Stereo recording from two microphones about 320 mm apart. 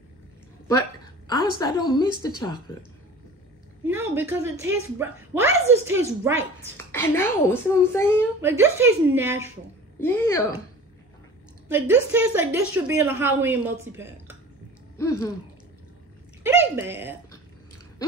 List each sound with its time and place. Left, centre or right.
0.7 s a sound: centre
1.6 s a child's voice: centre
3.8 s a woman's voice: centre
6.9 s a child's voice: centre
8.4 s a woman's voice: centre
9.9 s a child's voice: centre
12.1 s a woman's voice: centre
15.0 s a child's voice: centre
16.4 s speech: centre